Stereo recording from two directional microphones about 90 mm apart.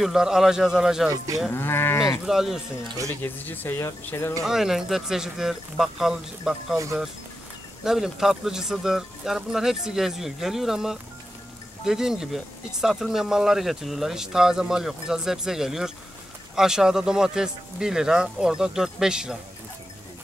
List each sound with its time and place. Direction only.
0.0 s speech: 5° right (ahead or behind)
1.1 s livestock: 40° right (ahead or behind)
1.5 s speech: 25° left (ahead or behind)
2.2 s speech: 5° right (ahead or behind)
3.2 s speech: 20° left (ahead or behind)
4.5 s speech: 5° right (ahead or behind)
7.8 s speech: 5° right (ahead or behind)